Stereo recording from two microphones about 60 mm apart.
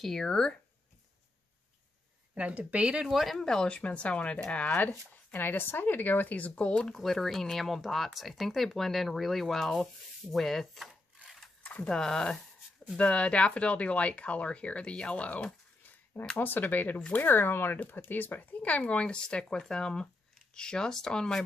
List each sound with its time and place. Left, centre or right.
0.0 s speech: centre
2.3 s speech: right
3.1 s speech: centre
3.4 s speech: centre
7.0 s speech: centre
11.2 s a sound: centre
11.6 s a sound: left
11.9 s speech: centre
16.3 s speech: left; by 21.5 s centre